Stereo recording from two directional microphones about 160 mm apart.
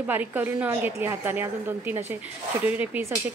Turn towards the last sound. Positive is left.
turn(degrees=-10)  # may be behind; listen again after turning